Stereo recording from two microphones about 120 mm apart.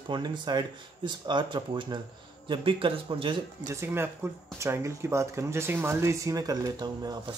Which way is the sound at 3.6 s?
20° right (ahead or behind).